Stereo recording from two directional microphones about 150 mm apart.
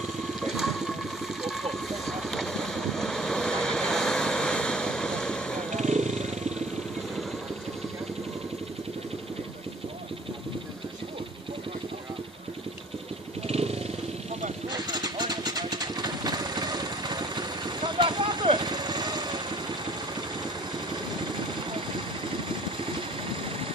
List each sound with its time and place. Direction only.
0.6 s water: centre (ahead or behind)
1.4 s boat: centre (ahead or behind)
5.8 s wild animals: 50° right (ahead or behind)
13.5 s vehicle: 45° right (ahead or behind)
14.7 s vehicle: 25° right (ahead or behind)